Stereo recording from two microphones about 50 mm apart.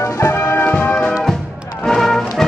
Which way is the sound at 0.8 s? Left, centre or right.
Left.